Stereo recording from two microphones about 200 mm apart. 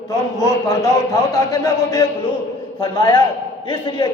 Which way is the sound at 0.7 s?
15° left (ahead or behind).